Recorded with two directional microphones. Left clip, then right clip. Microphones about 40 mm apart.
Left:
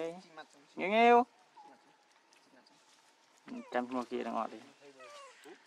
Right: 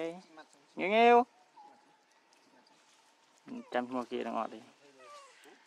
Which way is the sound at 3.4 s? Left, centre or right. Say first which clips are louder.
Even; left.